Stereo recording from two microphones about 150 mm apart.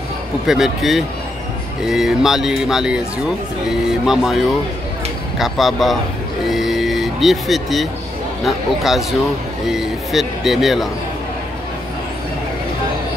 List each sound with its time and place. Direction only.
0.5 s speech: centre (ahead or behind)